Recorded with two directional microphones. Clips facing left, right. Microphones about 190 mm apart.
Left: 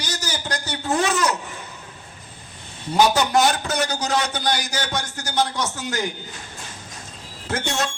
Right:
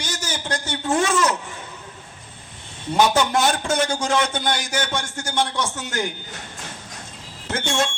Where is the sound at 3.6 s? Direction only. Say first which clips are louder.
Right 2 dB; 25° right (ahead or behind).